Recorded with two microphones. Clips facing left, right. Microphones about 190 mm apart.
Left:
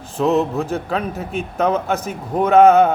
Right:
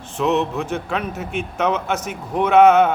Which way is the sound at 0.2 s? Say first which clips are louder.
Left 2 dB; 35° left (ahead or behind).